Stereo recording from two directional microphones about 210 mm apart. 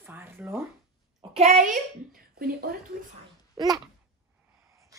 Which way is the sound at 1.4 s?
30° right (ahead or behind).